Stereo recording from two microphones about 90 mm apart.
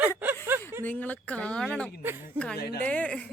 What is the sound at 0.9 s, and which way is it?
Speech, 20° left (ahead or behind).